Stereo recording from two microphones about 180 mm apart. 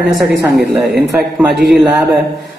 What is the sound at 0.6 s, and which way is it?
Speech, 65° right (ahead or behind).